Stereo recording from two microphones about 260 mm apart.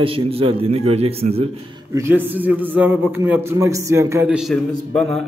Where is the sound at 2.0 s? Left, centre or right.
Centre.